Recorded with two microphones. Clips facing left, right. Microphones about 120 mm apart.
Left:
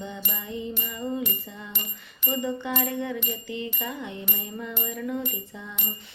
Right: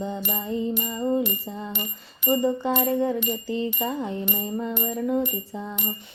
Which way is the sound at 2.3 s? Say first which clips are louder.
Right 6 dB; 35° right (ahead or behind).